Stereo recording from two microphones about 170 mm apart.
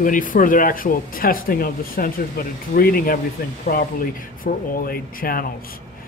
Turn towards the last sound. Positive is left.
turn(degrees=60)  # may be behind; listen again after turning